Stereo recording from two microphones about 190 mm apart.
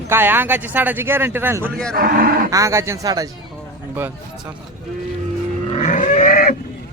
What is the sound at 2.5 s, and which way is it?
Speech, 15° right (ahead or behind).